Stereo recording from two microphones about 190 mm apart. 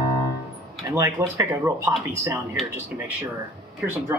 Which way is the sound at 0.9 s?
15° right (ahead or behind).